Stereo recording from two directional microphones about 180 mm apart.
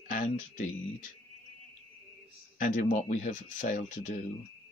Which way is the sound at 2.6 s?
45° left (ahead or behind).